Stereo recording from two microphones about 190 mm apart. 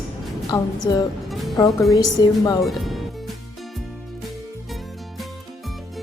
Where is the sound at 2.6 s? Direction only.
Centre (ahead or behind).